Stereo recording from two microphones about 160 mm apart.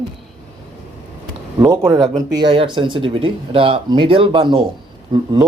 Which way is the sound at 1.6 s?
20° right (ahead or behind).